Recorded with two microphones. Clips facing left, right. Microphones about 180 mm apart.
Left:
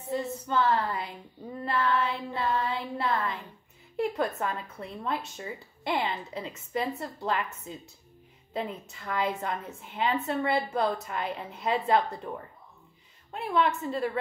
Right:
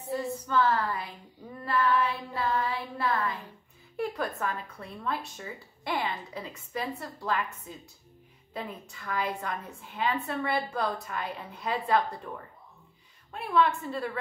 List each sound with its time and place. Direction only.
0.1 s a sound: 25° left (ahead or behind)
1.6 s child singing: 25° left (ahead or behind)
3.9 s a woman's voice: 25° left (ahead or behind)
13.3 s a woman's voice: 25° left (ahead or behind)